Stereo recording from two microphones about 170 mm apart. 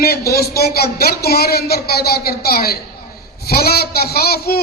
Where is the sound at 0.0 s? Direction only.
65° left (ahead or behind).